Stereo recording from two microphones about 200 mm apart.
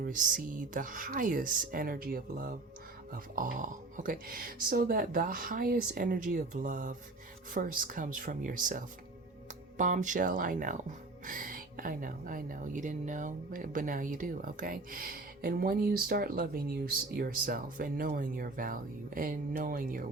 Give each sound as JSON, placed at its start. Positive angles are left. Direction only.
{"t": 0.0, "sound": "speech", "side_deg": -40}